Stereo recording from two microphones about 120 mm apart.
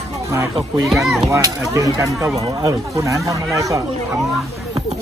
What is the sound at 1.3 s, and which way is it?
Speech, 25° right (ahead or behind).